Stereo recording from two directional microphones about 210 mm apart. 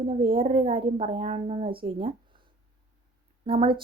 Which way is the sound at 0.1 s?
25° right (ahead or behind).